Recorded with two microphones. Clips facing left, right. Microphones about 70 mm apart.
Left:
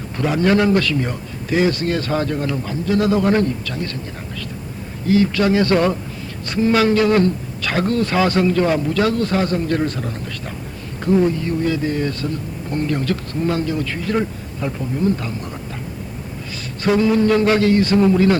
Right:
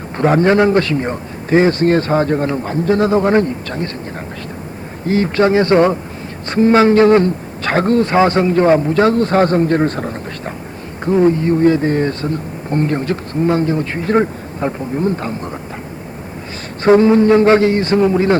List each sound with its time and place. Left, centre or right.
0.2 s speech: right
5.0 s a man's voice: right
16.8 s a man's voice: right